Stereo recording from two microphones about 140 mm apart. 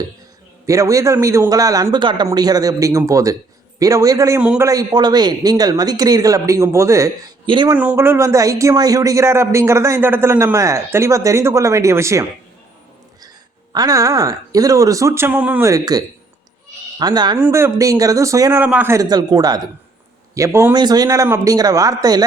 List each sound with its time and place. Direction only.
0.6 s a man's voice: 20° right (ahead or behind)
4.4 s a man's voice: 10° right (ahead or behind)
4.6 s a man's voice: 25° right (ahead or behind)
7.4 s speech: 35° right (ahead or behind)
7.8 s a man's voice: 15° right (ahead or behind)
13.7 s a man's voice: 25° right (ahead or behind)
15.7 s a man's voice: 25° right (ahead or behind)
17.3 s a man's voice: 15° right (ahead or behind)
18.6 s a man's voice: 15° right (ahead or behind)
18.9 s a man's voice: 30° right (ahead or behind)
20.7 s a man's voice: 30° right (ahead or behind)